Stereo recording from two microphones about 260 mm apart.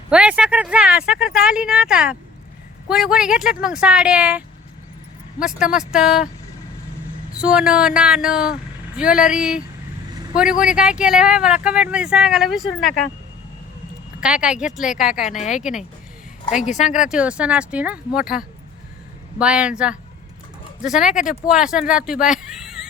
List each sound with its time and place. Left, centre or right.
0.1 s speech: centre
7.3 s speech: centre
14.2 s speech: centre
15.3 s speech: left
17.1 s speech: centre